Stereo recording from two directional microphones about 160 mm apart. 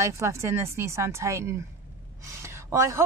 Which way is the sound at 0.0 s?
20° right (ahead or behind).